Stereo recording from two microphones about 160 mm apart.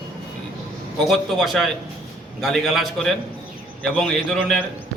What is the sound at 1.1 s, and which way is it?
A man's voice, centre (ahead or behind).